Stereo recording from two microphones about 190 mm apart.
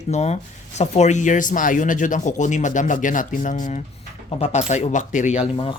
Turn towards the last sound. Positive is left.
turn(degrees=25)  # may be behind; listen again after turning